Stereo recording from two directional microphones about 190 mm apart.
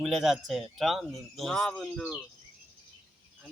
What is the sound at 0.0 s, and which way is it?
Speech, centre (ahead or behind).